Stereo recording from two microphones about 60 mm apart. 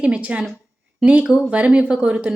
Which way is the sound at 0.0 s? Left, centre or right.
Centre.